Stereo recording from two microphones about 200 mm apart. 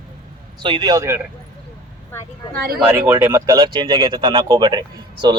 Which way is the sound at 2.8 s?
10° right (ahead or behind).